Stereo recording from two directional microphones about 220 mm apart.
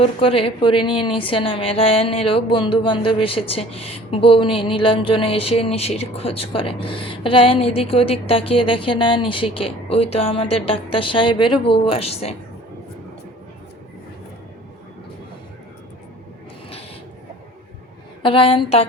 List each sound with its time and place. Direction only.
0.0 s a woman's voice: 25° left (ahead or behind)
18.2 s a woman's voice: 25° left (ahead or behind)